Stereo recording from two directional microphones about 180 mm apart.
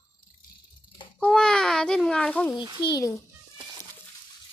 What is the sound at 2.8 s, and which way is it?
Speech, 20° left (ahead or behind).